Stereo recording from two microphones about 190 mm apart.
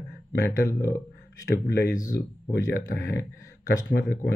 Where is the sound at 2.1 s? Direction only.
55° left (ahead or behind).